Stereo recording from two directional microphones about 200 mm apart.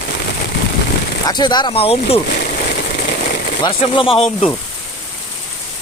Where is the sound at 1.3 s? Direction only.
20° left (ahead or behind).